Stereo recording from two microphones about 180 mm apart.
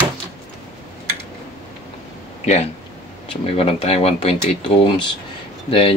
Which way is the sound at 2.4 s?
40° left (ahead or behind).